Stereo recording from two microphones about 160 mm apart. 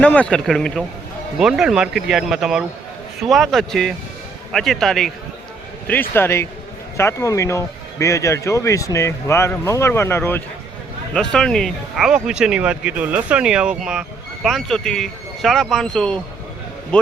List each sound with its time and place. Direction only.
0.0 s speech: 10° left (ahead or behind)
5.9 s speech: 15° left (ahead or behind)
11.1 s speech: 5° left (ahead or behind)